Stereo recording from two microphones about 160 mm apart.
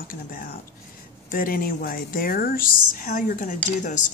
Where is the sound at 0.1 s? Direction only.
60° left (ahead or behind).